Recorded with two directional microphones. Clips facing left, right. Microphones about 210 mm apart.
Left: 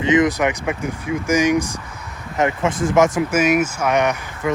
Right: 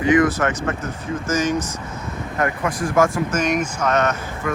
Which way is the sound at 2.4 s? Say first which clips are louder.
Left 4 dB; 25° left (ahead or behind).